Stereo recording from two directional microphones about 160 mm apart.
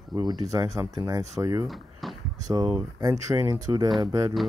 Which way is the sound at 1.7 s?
Centre (ahead or behind).